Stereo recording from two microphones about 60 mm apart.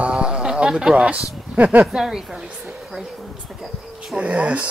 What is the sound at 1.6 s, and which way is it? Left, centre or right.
Speech, right.